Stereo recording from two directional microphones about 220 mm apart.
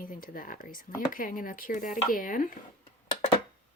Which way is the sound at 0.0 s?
40° left (ahead or behind).